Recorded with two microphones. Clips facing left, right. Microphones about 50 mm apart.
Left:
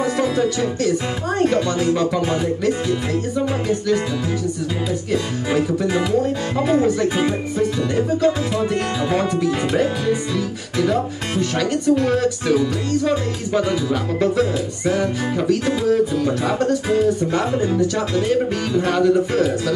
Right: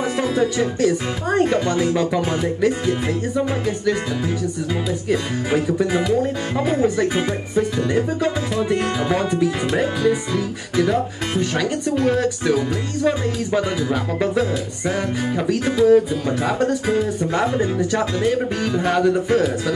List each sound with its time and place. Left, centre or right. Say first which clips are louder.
0.0 s music: left 1 dB; centre
5.5 s speech: even; centre
7.5 s music: right 4 dB; centre
9.1 s speech: left 1 dB; centre
13.8 s music: left 2 dB; centre
18.9 s speech: left 1 dB; centre